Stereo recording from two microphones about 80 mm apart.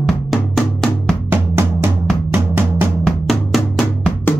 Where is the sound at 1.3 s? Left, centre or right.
Right.